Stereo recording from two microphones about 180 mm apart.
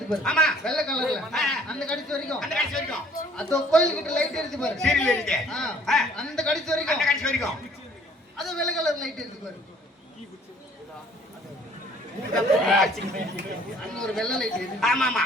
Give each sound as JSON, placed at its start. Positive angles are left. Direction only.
{"t": 0.1, "sound": "a man's voice", "side_deg": 5}
{"t": 12.3, "sound": "a man's voice", "side_deg": 0}
{"t": 14.0, "sound": "a man's voice", "side_deg": 5}